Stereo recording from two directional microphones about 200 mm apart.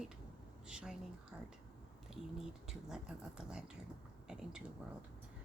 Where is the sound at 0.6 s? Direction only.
5° right (ahead or behind).